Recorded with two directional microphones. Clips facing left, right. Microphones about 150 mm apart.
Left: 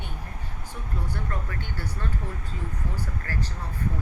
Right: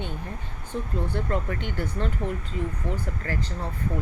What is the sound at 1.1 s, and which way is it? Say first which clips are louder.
Speech: right 8 dB; 25° right (ahead or behind).